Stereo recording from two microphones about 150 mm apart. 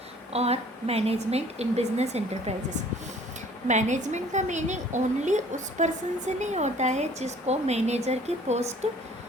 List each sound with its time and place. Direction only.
0.3 s a woman's voice: 45° right (ahead or behind)
3.7 s a woman's voice: 50° right (ahead or behind)